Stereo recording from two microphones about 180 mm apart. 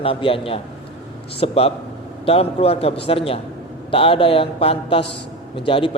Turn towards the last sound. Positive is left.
turn(degrees=30)  # may be behind; listen again after turning